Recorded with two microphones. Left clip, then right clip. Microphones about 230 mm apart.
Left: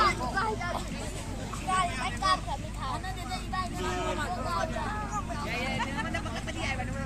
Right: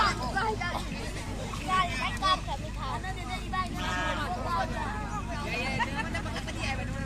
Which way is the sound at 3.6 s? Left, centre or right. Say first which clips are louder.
Right 2 dB; left.